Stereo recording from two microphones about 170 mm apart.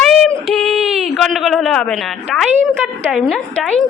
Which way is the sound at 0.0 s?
Centre (ahead or behind).